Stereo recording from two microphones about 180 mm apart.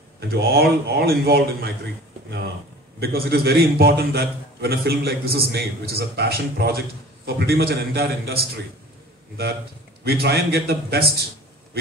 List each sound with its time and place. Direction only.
0.2 s a man's voice: 60° right (ahead or behind)
3.0 s a man's voice: 60° right (ahead or behind)
10.0 s a man's voice: 60° right (ahead or behind)